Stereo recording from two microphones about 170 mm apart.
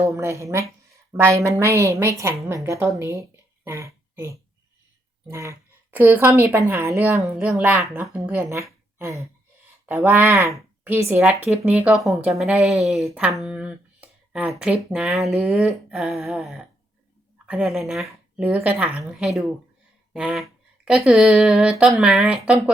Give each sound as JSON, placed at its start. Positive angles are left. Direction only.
{"t": 0.0, "sound": "speech", "side_deg": -15}
{"t": 3.0, "sound": "a sound", "side_deg": -15}
{"t": 5.3, "sound": "speech", "side_deg": -15}
{"t": 7.7, "sound": "speech", "side_deg": -5}